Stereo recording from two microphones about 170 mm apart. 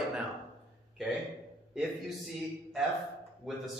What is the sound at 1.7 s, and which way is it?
Speech, 5° right (ahead or behind).